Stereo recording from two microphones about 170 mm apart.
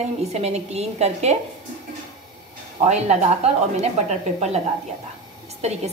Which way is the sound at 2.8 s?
40° right (ahead or behind).